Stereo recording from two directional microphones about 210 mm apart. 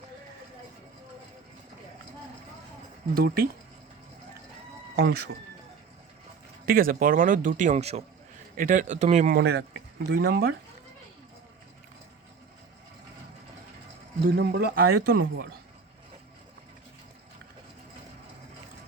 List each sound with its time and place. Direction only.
3.2 s a man's voice: 45° right (ahead or behind)
4.9 s speech: 50° right (ahead or behind)
6.7 s speech: 45° right (ahead or behind)
9.3 s a man's voice: 50° right (ahead or behind)
14.3 s a man's voice: 50° right (ahead or behind)